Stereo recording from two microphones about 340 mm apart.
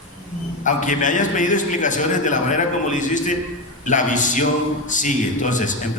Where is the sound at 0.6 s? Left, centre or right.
Left.